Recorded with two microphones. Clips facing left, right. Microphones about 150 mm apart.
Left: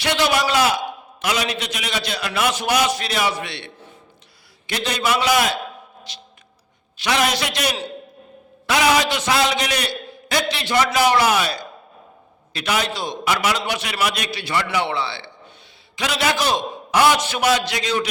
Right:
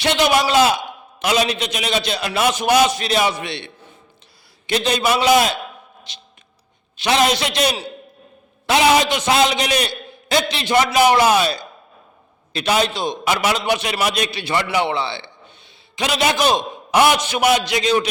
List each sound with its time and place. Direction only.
0.0 s a man's voice: 20° right (ahead or behind)